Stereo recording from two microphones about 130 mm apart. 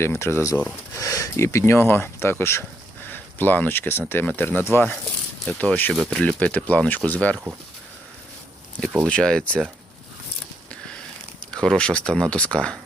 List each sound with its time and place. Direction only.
0.0 s speech: 20° left (ahead or behind)
0.9 s speech: 25° left (ahead or behind)
9.0 s speech: 5° left (ahead or behind)
11.5 s speech: 5° left (ahead or behind)